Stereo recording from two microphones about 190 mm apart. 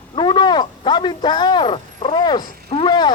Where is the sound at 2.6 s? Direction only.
25° left (ahead or behind).